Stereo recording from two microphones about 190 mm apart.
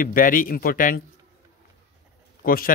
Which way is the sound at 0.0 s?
45° left (ahead or behind).